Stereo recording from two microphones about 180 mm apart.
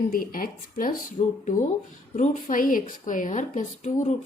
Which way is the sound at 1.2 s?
40° left (ahead or behind).